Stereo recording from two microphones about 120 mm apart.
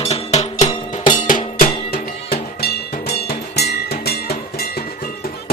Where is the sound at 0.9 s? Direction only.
90° left.